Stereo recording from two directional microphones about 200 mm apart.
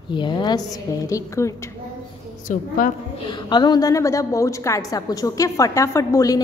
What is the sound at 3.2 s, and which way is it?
A woman's voice, 20° left (ahead or behind).